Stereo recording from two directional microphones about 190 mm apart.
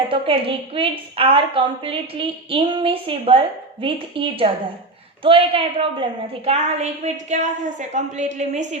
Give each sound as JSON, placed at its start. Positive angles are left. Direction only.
{"t": 0.1, "sound": "a woman's voice", "side_deg": -30}